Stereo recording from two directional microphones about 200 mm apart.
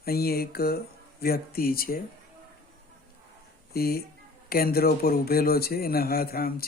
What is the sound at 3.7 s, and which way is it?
Speech, 50° left (ahead or behind).